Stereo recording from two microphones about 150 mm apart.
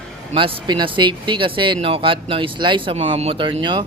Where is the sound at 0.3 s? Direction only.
30° right (ahead or behind).